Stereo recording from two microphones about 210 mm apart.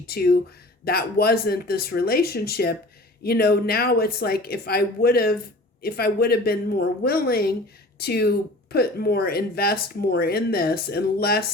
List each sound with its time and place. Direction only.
0.0 s speech: 50° left (ahead or behind)